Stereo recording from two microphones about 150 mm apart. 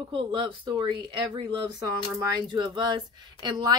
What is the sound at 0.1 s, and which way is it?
A woman's voice, 30° right (ahead or behind).